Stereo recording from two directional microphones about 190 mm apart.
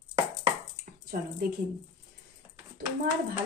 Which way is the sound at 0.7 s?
50° right (ahead or behind).